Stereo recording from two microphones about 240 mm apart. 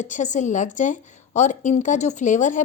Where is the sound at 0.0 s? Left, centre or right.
Left.